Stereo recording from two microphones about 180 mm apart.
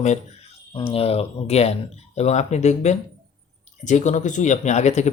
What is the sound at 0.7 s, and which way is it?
Speech, 30° left (ahead or behind).